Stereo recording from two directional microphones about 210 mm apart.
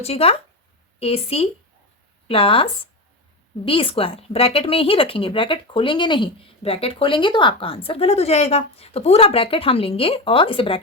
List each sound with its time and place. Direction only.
0.0 s speech: 30° left (ahead or behind)
3.7 s speech: 25° left (ahead or behind)